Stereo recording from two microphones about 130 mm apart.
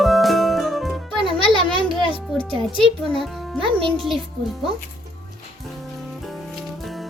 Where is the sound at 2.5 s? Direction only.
40° right (ahead or behind).